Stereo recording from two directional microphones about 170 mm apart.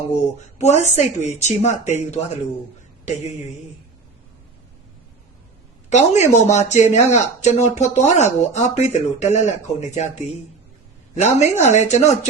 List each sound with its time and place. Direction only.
0.6 s speech: 40° left (ahead or behind)
5.9 s speech: 40° left (ahead or behind)